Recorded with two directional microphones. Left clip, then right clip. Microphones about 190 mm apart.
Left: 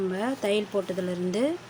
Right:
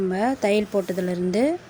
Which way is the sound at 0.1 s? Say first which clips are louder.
Right 5 dB; 25° right (ahead or behind).